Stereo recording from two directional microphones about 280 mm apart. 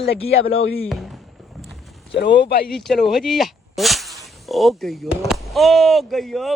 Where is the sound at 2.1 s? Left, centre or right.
Left.